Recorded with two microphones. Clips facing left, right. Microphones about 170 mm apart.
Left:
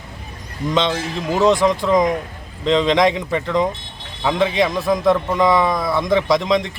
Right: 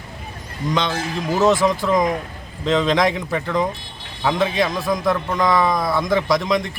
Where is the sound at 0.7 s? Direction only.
25° left (ahead or behind).